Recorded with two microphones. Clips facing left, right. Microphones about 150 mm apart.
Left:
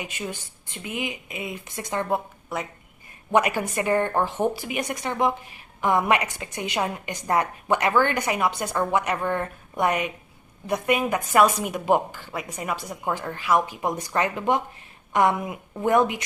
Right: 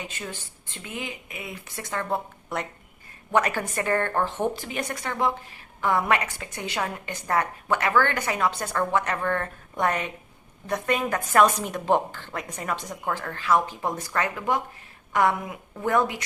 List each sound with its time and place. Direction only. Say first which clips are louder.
0.0 s speech: left 3 dB; 15° left (ahead or behind)
2.5 s a woman's voice: even; centre (ahead or behind); by 16.2 s 20° left (ahead or behind)